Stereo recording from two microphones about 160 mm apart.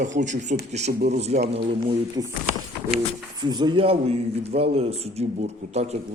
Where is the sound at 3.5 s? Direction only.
30° right (ahead or behind).